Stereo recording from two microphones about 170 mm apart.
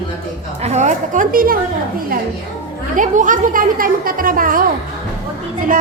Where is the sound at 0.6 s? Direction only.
40° right (ahead or behind); by 1.6 s 55° right (ahead or behind).